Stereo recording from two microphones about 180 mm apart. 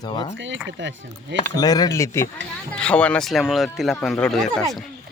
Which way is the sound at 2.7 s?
5° left (ahead or behind).